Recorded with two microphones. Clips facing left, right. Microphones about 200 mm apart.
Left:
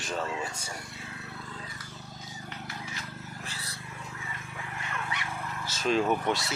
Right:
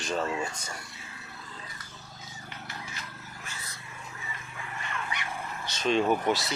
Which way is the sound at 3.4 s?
35° left (ahead or behind).